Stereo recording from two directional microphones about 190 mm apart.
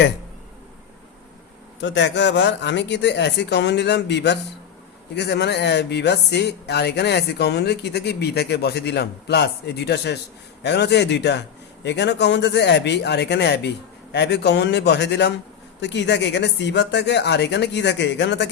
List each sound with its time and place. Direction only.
1.8 s speech: 70° left (ahead or behind)